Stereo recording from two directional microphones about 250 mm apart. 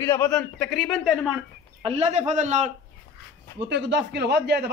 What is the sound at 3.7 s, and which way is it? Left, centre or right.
Speech, right.